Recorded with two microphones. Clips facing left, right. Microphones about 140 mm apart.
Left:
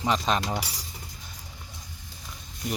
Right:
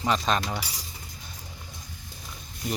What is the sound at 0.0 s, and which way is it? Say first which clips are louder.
Speech: even; 20° left (ahead or behind).